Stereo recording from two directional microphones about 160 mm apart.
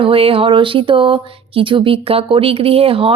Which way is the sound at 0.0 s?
35° right (ahead or behind).